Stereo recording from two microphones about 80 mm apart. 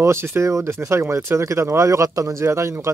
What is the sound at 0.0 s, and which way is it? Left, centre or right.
Speech, right.